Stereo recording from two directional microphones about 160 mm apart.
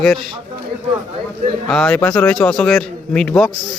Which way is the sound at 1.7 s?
5° left (ahead or behind).